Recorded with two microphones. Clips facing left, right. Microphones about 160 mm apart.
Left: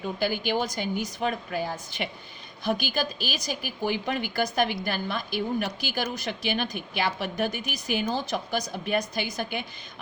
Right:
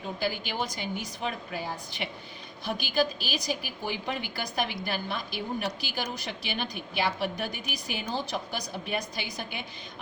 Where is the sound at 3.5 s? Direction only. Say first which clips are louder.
Left 7 dB; 50° left (ahead or behind).